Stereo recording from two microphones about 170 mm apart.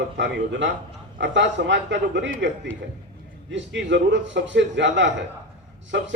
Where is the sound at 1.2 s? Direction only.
90° right.